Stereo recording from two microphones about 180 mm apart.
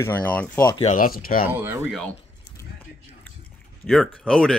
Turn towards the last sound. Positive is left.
turn(degrees=5)  # may be behind; listen again after turning